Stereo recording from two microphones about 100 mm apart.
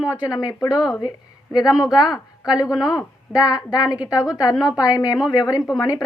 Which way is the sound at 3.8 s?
10° right (ahead or behind).